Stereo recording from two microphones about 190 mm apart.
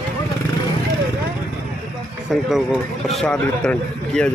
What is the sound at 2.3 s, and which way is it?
Speech, centre (ahead or behind).